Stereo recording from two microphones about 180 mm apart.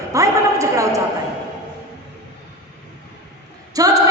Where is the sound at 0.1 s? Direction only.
15° right (ahead or behind).